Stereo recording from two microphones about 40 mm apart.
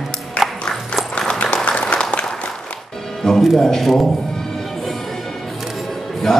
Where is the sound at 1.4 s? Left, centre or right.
Left.